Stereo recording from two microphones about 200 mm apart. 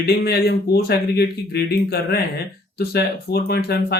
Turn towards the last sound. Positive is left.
turn(degrees=55)  # may be behind; listen again after turning